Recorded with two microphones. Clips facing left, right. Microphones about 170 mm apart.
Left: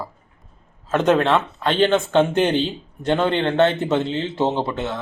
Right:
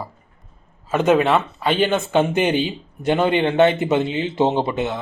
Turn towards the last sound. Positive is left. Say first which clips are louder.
# right 2 dB
turn(degrees=-15)  # may be behind; listen again after turning